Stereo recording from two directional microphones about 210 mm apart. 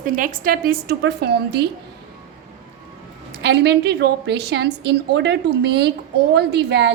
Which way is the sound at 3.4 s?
55° right (ahead or behind).